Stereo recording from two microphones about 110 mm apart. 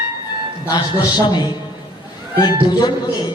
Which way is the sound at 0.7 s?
40° left (ahead or behind).